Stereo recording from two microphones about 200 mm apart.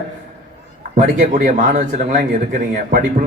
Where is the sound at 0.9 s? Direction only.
40° right (ahead or behind).